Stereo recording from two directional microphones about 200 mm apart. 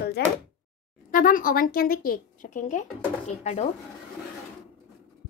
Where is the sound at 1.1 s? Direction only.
45° left (ahead or behind).